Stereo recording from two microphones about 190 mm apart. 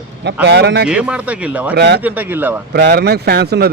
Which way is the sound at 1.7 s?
65° right (ahead or behind).